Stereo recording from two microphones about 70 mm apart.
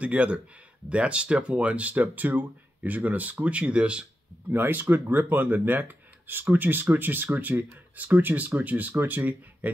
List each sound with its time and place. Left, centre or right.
0.0 s speech: centre
4.5 s speech: right